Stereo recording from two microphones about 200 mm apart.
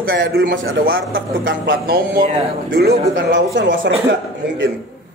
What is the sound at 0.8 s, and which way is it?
Speech, 45° right (ahead or behind).